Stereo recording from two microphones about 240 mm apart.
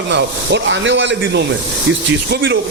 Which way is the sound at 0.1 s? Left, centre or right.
Right.